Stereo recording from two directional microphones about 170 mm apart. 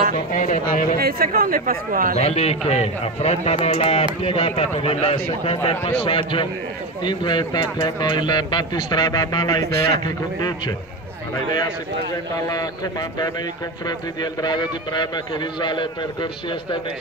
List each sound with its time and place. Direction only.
0.3 s speech: 50° left (ahead or behind)
0.9 s a man's voice: 60° right (ahead or behind)
2.1 s a man's voice: 40° left (ahead or behind); by 9.6 s 25° left (ahead or behind)
9.7 s a man's voice: 65° right (ahead or behind)
13.8 s speech: 25° left (ahead or behind)